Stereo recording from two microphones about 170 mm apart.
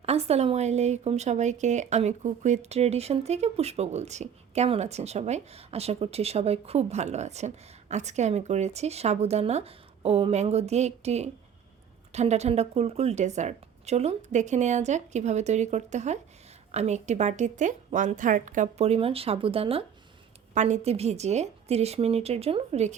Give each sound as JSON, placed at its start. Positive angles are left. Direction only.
{"t": 0.0, "sound": "a woman's voice", "side_deg": -40}